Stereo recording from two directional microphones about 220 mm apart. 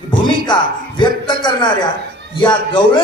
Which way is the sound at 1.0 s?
20° left (ahead or behind).